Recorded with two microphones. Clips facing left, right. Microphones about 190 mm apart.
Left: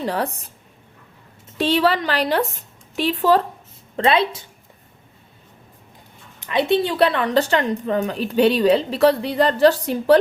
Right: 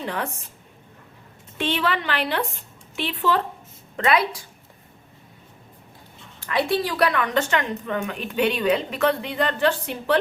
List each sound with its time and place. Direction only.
0.0 s a woman's voice: 35° left (ahead or behind)
1.5 s a woman's voice: 35° left (ahead or behind)
3.9 s a woman's voice: 30° left (ahead or behind)
6.4 s a woman's voice: 20° left (ahead or behind); by 10.2 s 40° left (ahead or behind)